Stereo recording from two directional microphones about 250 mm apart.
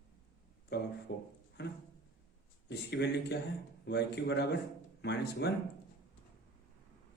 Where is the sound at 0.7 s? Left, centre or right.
Left.